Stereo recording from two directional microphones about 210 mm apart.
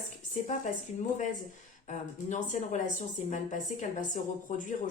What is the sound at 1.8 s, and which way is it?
A woman's voice, 35° left (ahead or behind).